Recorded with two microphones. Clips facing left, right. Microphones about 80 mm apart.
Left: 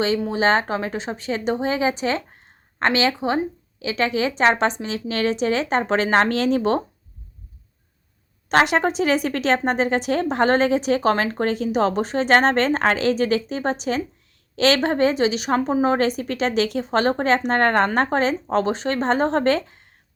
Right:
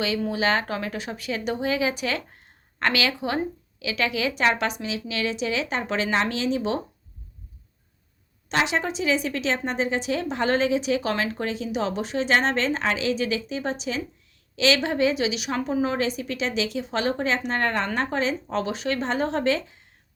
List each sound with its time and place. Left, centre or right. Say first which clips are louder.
0.3 s a woman's voice: left 5 dB; left
8.4 s speech: left 7 dB; left